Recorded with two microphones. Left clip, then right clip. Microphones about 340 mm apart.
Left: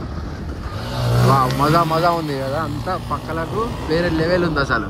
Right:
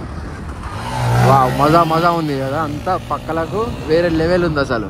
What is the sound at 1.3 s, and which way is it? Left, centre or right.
Speech, right.